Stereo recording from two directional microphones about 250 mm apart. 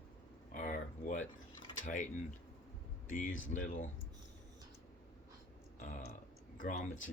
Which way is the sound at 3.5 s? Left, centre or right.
Left.